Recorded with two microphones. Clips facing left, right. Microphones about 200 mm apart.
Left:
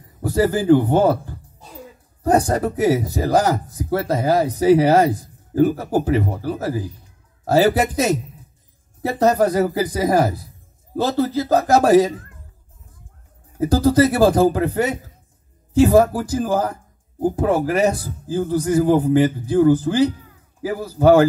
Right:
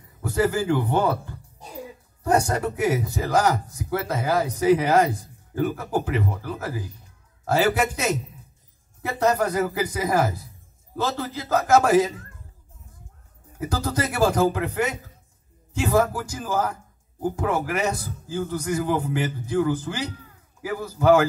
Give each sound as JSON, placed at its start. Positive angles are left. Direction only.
{"t": 0.2, "sound": "speech", "side_deg": 35}
{"t": 13.6, "sound": "speech", "side_deg": 35}